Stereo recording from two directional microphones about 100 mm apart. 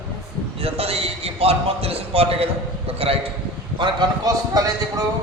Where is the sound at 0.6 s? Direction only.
80° right.